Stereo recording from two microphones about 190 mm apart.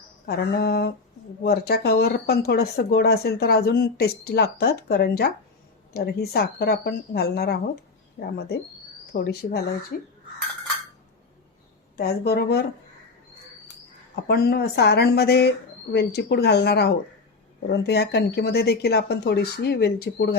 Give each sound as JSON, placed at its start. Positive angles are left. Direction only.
{"t": 0.3, "sound": "speech", "side_deg": 55}
{"t": 11.9, "sound": "speech", "side_deg": 55}
{"t": 14.3, "sound": "speech", "side_deg": 55}